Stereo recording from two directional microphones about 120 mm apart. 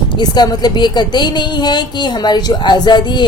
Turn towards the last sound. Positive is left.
turn(degrees=40)  # may be behind; listen again after turning